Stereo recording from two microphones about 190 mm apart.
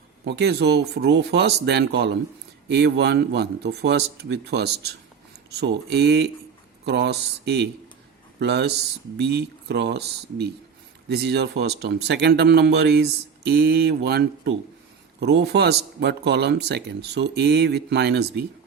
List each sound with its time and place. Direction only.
0.3 s speech: 60° right (ahead or behind)